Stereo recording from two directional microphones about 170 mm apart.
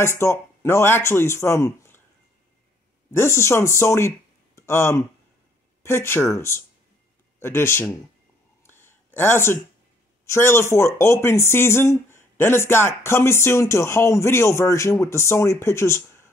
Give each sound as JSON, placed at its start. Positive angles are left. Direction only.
{"t": 0.2, "sound": "speech", "side_deg": 15}
{"t": 3.1, "sound": "speech", "side_deg": 15}
{"t": 8.6, "sound": "a sound", "side_deg": 15}
{"t": 10.2, "sound": "speech", "side_deg": 15}